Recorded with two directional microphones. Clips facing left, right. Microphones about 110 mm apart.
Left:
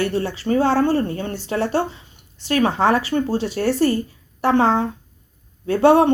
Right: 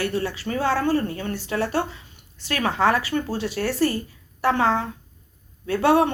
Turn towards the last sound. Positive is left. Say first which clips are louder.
# left 5 dB
turn(degrees=30)  # may be behind; listen again after turning